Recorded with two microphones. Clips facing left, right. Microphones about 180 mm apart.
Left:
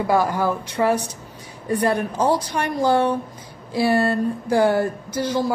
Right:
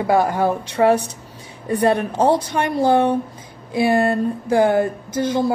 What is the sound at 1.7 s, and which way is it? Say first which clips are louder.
A woman's voice: right 3 dB; 25° right (ahead or behind).